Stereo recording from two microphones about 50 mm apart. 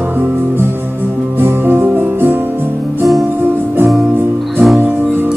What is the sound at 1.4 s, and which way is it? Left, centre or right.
Music, right.